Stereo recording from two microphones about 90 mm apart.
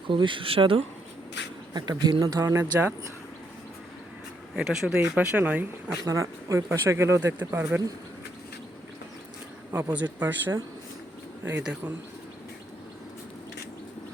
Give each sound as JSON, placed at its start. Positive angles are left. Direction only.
{"t": 0.1, "sound": "speech", "side_deg": -65}
{"t": 1.7, "sound": "speech", "side_deg": -50}
{"t": 4.5, "sound": "speech", "side_deg": -5}
{"t": 6.1, "sound": "speech", "side_deg": -35}
{"t": 9.7, "sound": "speech", "side_deg": -20}